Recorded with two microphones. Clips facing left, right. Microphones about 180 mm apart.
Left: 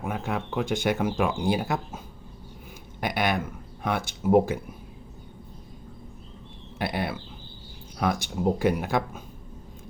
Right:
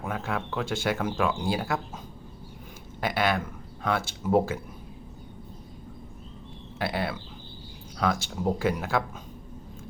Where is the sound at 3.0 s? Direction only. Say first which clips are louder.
Even; 15° left (ahead or behind).